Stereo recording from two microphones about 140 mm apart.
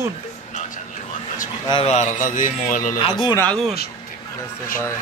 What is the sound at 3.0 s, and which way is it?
Speech, 35° left (ahead or behind).